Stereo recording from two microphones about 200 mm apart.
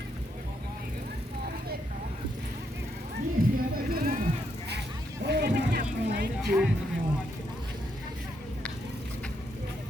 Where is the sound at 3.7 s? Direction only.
45° right (ahead or behind).